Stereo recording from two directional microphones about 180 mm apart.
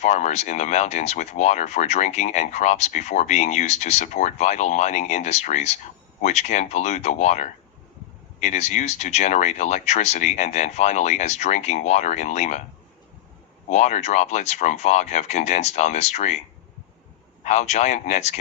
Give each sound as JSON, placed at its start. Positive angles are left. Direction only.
{"t": 0.0, "sound": "speech", "side_deg": 40}
{"t": 13.7, "sound": "speech", "side_deg": 40}
{"t": 17.4, "sound": "speech", "side_deg": 40}